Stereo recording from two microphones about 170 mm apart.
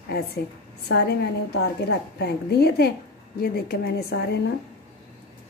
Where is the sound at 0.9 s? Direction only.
85° left; by 4.1 s 65° left (ahead or behind).